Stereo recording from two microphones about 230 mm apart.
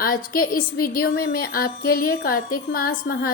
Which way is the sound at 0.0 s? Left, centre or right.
Left.